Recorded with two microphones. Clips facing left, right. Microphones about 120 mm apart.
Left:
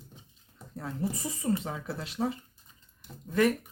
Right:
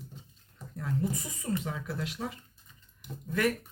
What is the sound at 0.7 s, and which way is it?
Speech, 30° left (ahead or behind).